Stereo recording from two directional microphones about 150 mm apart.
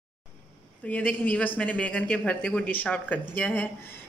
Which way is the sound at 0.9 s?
10° left (ahead or behind).